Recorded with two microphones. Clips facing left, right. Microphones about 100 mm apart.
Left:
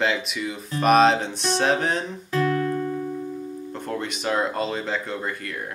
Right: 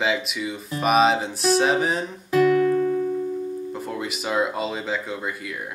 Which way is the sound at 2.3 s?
10° right (ahead or behind).